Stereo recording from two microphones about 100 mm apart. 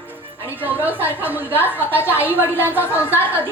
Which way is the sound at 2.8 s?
25° left (ahead or behind).